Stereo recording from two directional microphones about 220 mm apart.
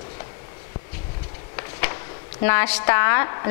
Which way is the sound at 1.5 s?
20° left (ahead or behind).